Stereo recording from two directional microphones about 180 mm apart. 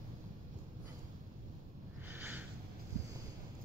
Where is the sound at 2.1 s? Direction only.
10° right (ahead or behind).